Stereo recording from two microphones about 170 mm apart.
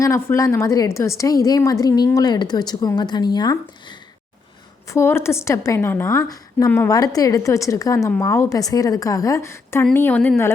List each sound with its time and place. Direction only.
0.0 s a woman's voice: 15° left (ahead or behind)